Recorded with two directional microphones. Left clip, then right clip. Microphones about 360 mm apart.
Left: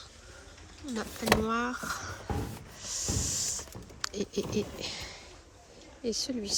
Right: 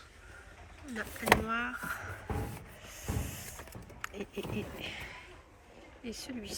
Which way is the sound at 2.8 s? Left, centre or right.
Centre.